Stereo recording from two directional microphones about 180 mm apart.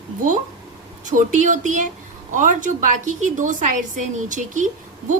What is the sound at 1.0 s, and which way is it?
A woman's voice, 45° right (ahead or behind).